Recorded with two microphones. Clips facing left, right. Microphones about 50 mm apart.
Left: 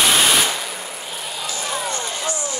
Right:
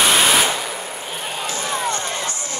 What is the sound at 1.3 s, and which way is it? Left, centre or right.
Vehicle, right.